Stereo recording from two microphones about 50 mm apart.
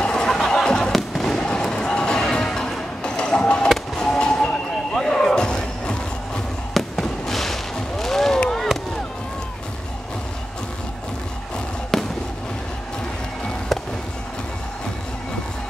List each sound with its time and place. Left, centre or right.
0.0 s a sound: centre
0.9 s fireworks: centre
6.7 s fireworks: centre
11.9 s fireworks: centre